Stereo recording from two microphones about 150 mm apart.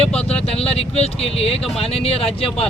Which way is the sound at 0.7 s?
40° left (ahead or behind).